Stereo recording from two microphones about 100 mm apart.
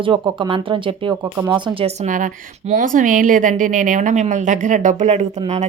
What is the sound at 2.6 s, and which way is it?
Speech, 90° right.